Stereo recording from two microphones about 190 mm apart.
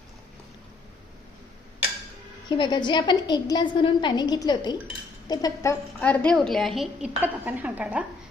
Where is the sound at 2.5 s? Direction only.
25° left (ahead or behind); by 8.0 s 5° right (ahead or behind).